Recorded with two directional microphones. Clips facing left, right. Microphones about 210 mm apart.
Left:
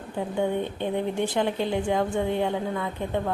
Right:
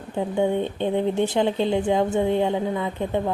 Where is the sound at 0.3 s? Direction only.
20° right (ahead or behind).